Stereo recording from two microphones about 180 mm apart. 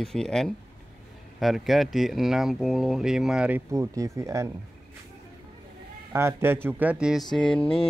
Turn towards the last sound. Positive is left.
turn(degrees=5)  # may be behind; listen again after turning